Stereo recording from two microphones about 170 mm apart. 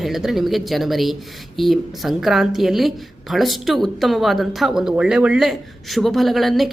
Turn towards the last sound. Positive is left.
turn(degrees=0)  # may be behind; listen again after turning